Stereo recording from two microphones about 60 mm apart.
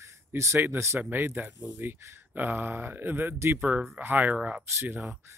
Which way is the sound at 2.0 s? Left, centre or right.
Right.